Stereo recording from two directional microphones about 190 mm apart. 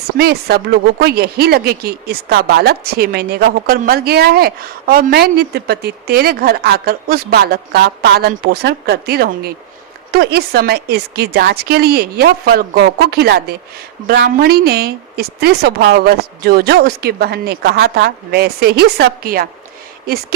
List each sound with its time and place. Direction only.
0.2 s speech: 55° right (ahead or behind)